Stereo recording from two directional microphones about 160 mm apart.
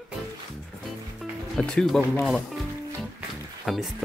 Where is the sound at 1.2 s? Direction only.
5° left (ahead or behind).